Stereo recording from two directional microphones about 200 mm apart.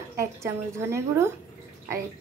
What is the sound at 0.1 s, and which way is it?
A woman's voice, 15° right (ahead or behind).